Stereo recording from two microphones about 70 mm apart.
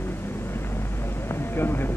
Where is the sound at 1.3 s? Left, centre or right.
Left.